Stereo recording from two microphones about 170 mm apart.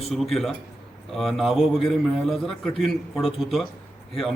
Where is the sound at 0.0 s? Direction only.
Centre (ahead or behind).